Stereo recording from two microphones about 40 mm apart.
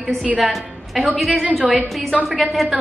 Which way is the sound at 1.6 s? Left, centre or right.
Right.